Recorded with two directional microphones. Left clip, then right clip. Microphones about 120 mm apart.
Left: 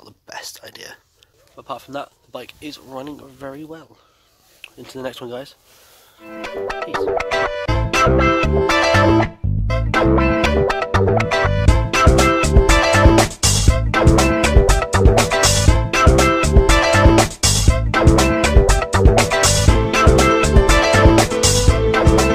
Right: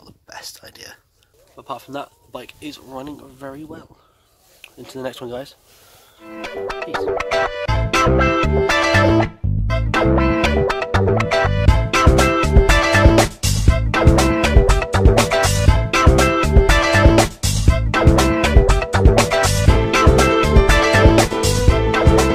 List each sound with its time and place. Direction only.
0.0 s whispering: 45° left (ahead or behind)
1.6 s speech: 10° left (ahead or behind); by 3.8 s 30° left (ahead or behind)
4.8 s speech: centre (ahead or behind)
6.2 s music: centre (ahead or behind)